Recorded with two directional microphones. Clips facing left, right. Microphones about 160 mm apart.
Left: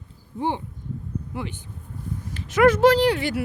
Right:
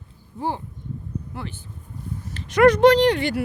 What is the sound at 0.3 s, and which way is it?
Speech, 20° left (ahead or behind).